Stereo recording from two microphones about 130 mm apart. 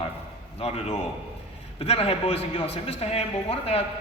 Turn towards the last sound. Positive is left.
turn(degrees=50)  # may be behind; listen again after turning